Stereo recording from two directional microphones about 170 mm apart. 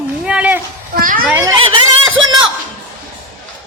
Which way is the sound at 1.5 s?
30° right (ahead or behind).